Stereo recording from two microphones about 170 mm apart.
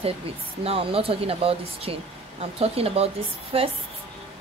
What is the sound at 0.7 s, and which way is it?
Speech, 35° right (ahead or behind).